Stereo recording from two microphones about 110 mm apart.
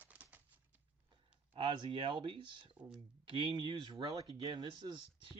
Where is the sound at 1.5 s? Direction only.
50° right (ahead or behind).